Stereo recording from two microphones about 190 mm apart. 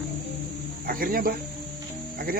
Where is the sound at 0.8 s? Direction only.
50° right (ahead or behind).